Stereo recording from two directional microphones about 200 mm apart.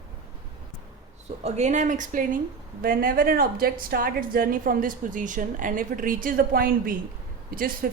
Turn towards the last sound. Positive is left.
turn(degrees=-45)  # may be behind; listen again after turning